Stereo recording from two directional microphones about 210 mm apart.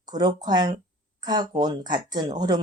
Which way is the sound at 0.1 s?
20° right (ahead or behind).